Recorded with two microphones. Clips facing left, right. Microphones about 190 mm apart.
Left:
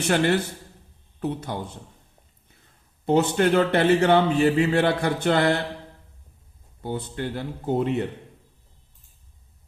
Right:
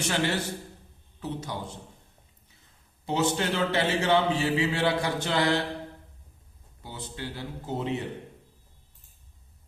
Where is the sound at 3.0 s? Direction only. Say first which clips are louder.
Left 7 dB; 55° left (ahead or behind).